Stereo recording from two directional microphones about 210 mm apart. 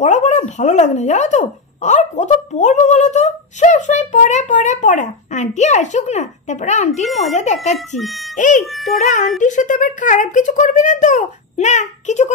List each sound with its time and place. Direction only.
0.0 s speech: 35° left (ahead or behind)